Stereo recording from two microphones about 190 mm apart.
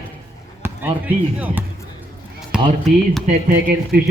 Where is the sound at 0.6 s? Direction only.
10° right (ahead or behind).